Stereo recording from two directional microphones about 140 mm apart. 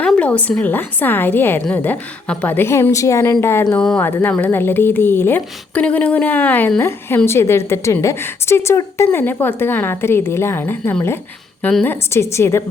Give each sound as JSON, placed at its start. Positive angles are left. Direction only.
{"t": 0.0, "sound": "speech", "side_deg": 10}
{"t": 3.8, "sound": "a woman's voice", "side_deg": 5}